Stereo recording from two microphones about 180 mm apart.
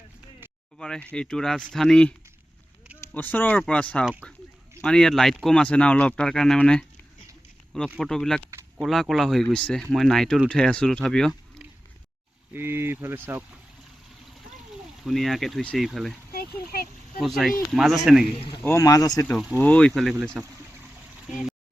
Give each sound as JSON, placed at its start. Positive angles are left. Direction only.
{"t": 0.8, "sound": "speech", "side_deg": 5}
{"t": 7.9, "sound": "speech", "side_deg": 0}
{"t": 12.5, "sound": "speech", "side_deg": -10}
{"t": 15.0, "sound": "speech", "side_deg": 0}
{"t": 16.3, "sound": "a sound", "side_deg": 55}
{"t": 17.2, "sound": "speech", "side_deg": 0}
{"t": 18.3, "sound": "speech", "side_deg": 30}
{"t": 18.6, "sound": "speech", "side_deg": 15}
{"t": 19.2, "sound": "speech", "side_deg": 10}